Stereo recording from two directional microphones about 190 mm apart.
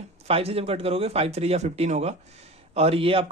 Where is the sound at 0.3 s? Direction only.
30° right (ahead or behind).